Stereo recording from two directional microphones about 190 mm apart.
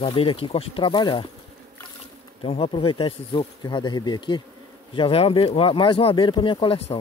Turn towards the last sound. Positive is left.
turn(degrees=30)  # may be behind; listen again after turning